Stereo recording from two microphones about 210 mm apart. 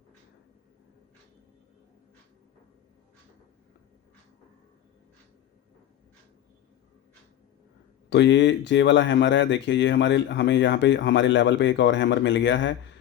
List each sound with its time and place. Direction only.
8.1 s speech: 55° left (ahead or behind)